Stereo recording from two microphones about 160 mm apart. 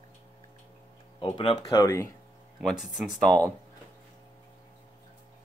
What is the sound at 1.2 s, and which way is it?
Speech, 30° left (ahead or behind).